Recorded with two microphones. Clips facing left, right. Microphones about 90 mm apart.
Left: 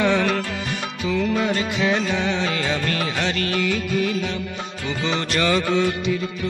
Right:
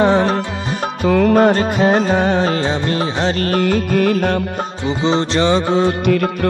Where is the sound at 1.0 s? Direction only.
50° right (ahead or behind).